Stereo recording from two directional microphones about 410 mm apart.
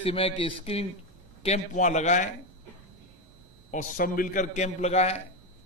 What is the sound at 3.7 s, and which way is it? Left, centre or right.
A man's voice, centre.